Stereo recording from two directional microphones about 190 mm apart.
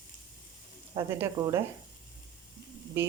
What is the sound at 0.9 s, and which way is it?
Speech, 15° right (ahead or behind).